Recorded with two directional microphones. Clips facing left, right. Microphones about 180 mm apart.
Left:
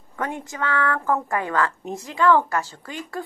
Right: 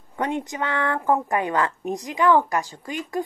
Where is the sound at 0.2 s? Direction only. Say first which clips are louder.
Right 2 dB; 20° right (ahead or behind).